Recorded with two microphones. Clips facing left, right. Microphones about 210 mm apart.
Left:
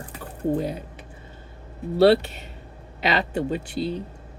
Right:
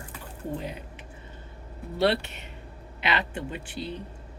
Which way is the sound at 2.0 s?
35° left (ahead or behind).